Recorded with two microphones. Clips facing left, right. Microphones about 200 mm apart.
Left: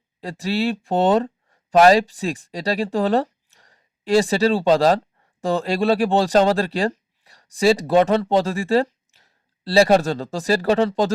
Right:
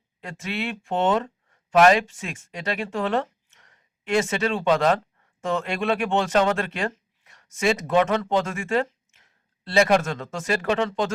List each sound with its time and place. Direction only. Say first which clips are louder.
0.2 s speech: left 7 dB; 35° left (ahead or behind)